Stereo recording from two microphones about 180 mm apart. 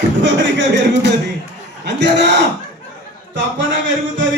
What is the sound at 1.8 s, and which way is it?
Speech, 75° right (ahead or behind).